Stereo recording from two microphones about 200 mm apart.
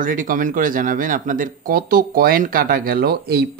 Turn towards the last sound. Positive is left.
turn(degrees=-50)  # may be behind; listen again after turning